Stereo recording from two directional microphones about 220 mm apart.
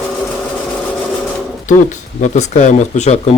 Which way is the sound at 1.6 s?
35° left (ahead or behind).